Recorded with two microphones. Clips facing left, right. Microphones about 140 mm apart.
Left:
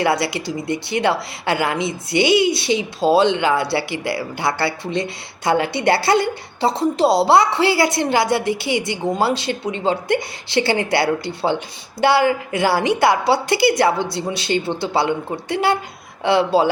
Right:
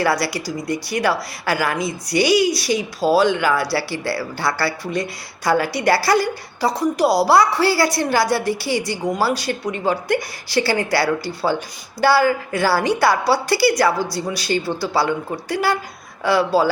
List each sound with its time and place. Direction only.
0.0 s a woman's voice: 25° left (ahead or behind)